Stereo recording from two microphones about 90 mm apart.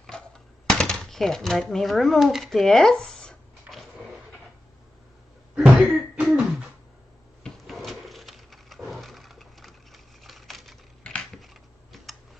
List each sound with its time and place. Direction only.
0.7 s speech: 10° left (ahead or behind)
5.6 s cough: 15° right (ahead or behind)
7.4 s a sound: centre (ahead or behind)